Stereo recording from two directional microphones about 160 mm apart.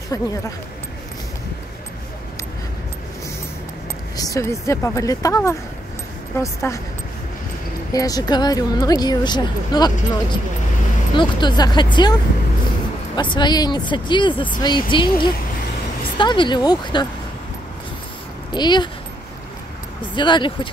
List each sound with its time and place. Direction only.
0.1 s speech: 20° left (ahead or behind)
4.2 s speech: 20° left (ahead or behind)
7.9 s speech: 20° left (ahead or behind)
11.1 s speech: 25° left (ahead or behind)
18.5 s speech: 30° left (ahead or behind)
20.2 s speech: 30° left (ahead or behind)